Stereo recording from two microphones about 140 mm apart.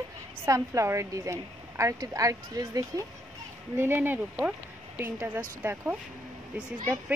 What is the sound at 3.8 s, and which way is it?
Speech, 15° right (ahead or behind).